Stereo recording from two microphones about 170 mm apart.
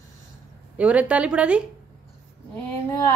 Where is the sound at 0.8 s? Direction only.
10° right (ahead or behind).